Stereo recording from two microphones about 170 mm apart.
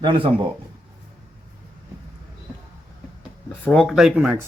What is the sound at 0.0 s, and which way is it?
Speech, 30° right (ahead or behind).